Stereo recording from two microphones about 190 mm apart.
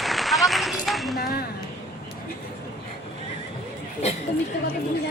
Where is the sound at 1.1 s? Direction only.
55° left (ahead or behind).